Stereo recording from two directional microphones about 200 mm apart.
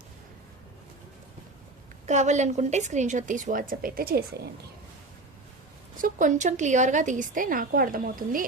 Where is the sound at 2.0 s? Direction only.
35° right (ahead or behind).